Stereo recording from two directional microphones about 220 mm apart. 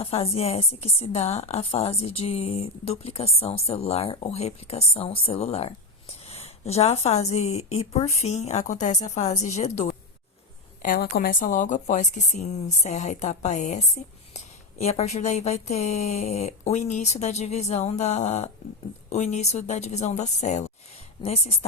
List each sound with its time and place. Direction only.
0.0 s a woman's voice: 25° left (ahead or behind)
10.8 s a woman's voice: 40° left (ahead or behind)